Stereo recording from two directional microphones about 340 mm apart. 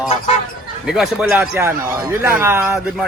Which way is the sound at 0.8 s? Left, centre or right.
Centre.